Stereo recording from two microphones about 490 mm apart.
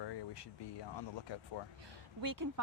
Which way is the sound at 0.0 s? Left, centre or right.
Left.